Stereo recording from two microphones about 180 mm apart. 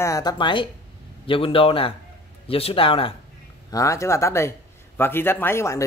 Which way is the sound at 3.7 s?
15° left (ahead or behind).